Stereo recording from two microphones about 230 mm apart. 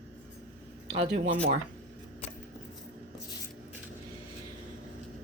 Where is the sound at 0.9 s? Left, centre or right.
Right.